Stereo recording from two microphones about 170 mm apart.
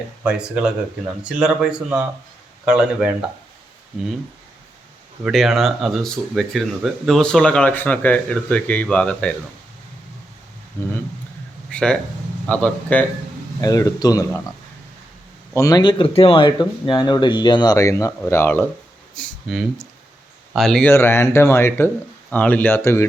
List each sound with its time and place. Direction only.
0.2 s speech: 5° right (ahead or behind)
5.2 s speech: centre (ahead or behind)
11.7 s a sound: 5° left (ahead or behind)
12.5 s speech: 10° left (ahead or behind)
13.6 s speech: 20° left (ahead or behind)
15.5 s speech: 20° left (ahead or behind)
19.1 s speech: centre (ahead or behind)
20.9 s speech: 15° left (ahead or behind)